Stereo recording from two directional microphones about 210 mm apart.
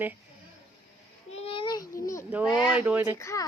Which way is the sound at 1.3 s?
30° left (ahead or behind).